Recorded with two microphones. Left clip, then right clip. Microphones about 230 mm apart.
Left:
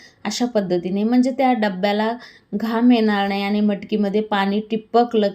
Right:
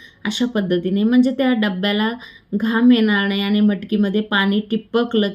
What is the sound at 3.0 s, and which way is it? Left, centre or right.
Speech, left.